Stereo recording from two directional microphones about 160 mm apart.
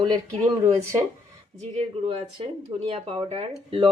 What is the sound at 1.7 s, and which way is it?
Speech, 40° right (ahead or behind).